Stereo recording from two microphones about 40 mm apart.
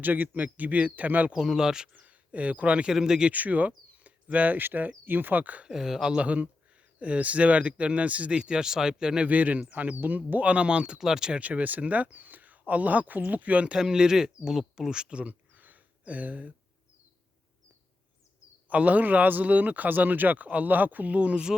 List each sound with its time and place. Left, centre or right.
0.0 s speech: right
1.3 s speech: centre
2.0 s speech: right
2.9 s speech: centre
3.3 s speech: right
5.6 s speech: centre
6.1 s speech: right
8.4 s speech: centre
9.2 s speech: right; by 11.3 s centre
11.3 s speech: right
13.7 s speech: centre
15.2 s a sound: right
18.7 s speech: right